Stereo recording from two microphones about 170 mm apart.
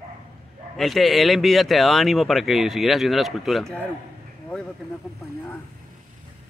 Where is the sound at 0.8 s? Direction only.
Centre (ahead or behind).